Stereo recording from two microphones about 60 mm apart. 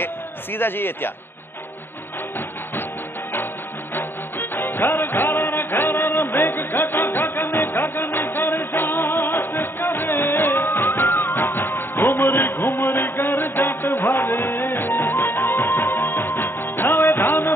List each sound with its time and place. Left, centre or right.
0.0 s a man's voice: left
3.9 s music: left